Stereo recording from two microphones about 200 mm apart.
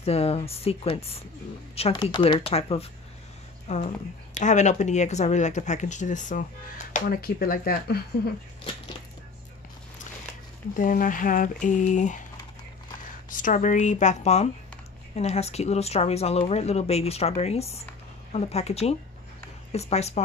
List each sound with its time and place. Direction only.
0.0 s speech: 30° left (ahead or behind); by 8.0 s 45° left (ahead or behind)
10.8 s speech: 45° left (ahead or behind)
13.3 s speech: 40° left (ahead or behind)